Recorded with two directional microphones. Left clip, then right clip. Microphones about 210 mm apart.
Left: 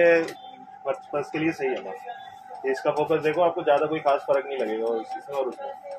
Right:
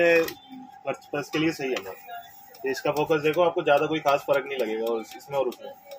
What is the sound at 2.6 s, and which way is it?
Speech, 50° right (ahead or behind).